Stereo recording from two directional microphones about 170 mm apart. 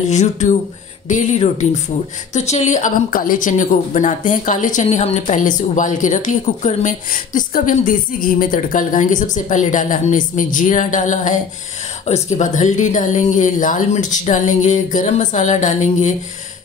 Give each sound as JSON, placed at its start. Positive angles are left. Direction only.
{"t": 0.1, "sound": "a woman's voice", "side_deg": 45}